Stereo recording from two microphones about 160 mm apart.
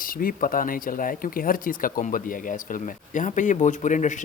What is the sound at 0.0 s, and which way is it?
Speech, 60° left (ahead or behind).